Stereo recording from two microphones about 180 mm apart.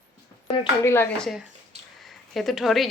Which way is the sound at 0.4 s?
30° left (ahead or behind).